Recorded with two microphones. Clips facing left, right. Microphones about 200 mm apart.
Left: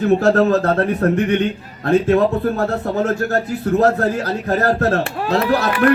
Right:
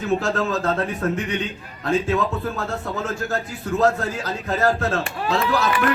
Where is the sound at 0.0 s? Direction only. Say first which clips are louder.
Left 8 dB; 65° left (ahead or behind).